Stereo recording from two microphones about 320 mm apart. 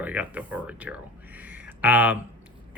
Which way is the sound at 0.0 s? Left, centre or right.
Centre.